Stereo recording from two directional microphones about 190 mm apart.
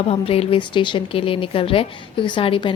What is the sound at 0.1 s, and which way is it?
Speech, 30° left (ahead or behind).